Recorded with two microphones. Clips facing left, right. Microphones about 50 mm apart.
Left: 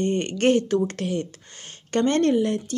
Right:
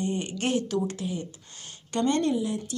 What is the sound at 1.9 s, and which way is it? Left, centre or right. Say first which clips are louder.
Speech: left 5 dB; left.